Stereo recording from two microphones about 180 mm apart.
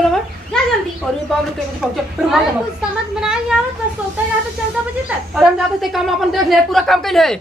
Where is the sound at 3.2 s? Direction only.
5° right (ahead or behind).